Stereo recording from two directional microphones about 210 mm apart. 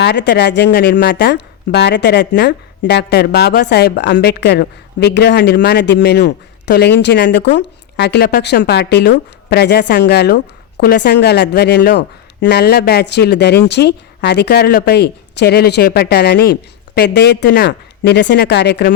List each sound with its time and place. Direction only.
0.0 s speech: 50° left (ahead or behind)